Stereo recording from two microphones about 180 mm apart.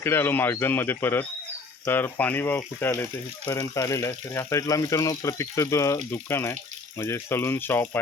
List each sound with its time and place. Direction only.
0.0 s speech: 15° left (ahead or behind)